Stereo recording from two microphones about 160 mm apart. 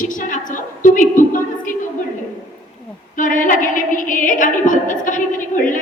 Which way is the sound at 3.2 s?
55° left (ahead or behind).